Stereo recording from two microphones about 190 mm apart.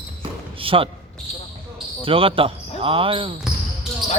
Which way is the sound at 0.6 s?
30° right (ahead or behind).